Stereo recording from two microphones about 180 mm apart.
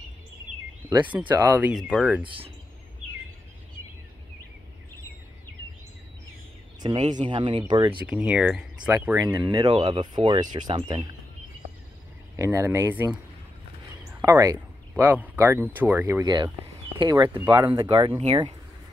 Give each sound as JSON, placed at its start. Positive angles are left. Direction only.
{"t": 1.1, "sound": "speech", "side_deg": -10}
{"t": 2.2, "sound": "speech", "side_deg": -30}
{"t": 6.8, "sound": "speech", "side_deg": -30}
{"t": 8.1, "sound": "speech", "side_deg": -5}
{"t": 12.4, "sound": "speech", "side_deg": -15}
{"t": 14.2, "sound": "speech", "side_deg": -15}